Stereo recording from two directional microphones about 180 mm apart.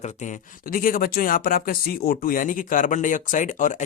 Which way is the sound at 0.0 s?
40° left (ahead or behind).